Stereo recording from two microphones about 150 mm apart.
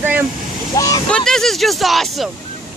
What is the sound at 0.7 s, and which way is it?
Speech, 25° left (ahead or behind).